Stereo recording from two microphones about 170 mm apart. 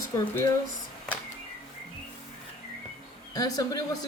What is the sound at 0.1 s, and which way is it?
Speech, 20° left (ahead or behind).